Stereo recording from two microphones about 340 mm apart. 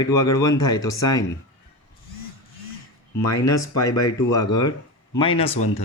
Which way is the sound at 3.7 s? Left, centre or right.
Centre.